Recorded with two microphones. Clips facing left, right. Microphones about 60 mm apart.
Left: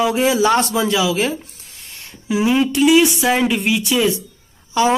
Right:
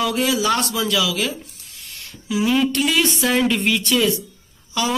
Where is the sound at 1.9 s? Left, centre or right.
Left.